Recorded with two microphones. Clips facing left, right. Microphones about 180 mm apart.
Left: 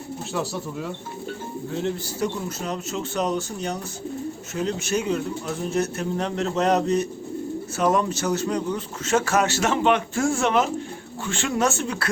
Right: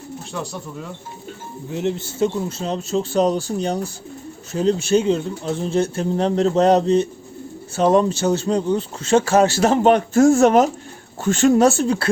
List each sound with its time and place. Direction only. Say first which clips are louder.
0.3 s speech: left 2 dB; 5° left (ahead or behind)
1.7 s a man's voice: right 5 dB; 20° right (ahead or behind)